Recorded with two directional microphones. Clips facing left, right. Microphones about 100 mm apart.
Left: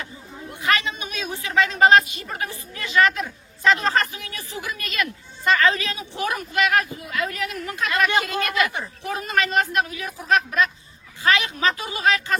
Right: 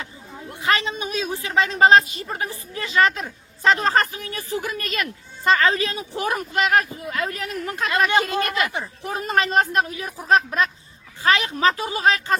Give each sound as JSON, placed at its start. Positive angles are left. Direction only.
{"t": 0.6, "sound": "a woman's voice", "side_deg": -30}